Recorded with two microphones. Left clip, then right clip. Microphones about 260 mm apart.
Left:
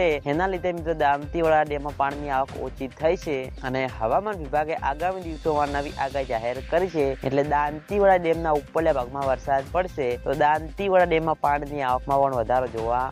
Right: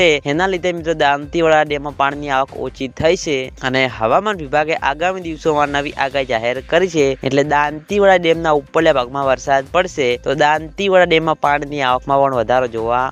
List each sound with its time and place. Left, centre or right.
0.0 s speech: right